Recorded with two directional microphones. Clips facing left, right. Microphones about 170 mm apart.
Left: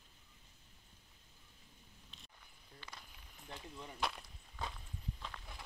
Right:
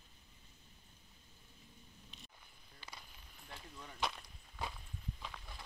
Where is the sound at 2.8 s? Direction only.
5° right (ahead or behind).